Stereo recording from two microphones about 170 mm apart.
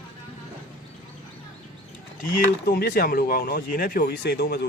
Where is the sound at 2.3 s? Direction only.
60° left (ahead or behind).